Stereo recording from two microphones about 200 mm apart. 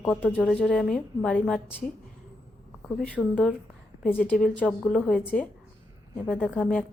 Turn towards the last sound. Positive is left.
turn(degrees=5)  # may be behind; listen again after turning